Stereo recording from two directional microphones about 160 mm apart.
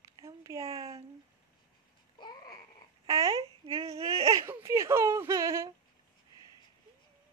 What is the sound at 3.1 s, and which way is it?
Babbling, 20° right (ahead or behind).